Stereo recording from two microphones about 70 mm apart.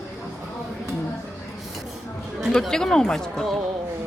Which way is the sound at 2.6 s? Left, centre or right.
Centre.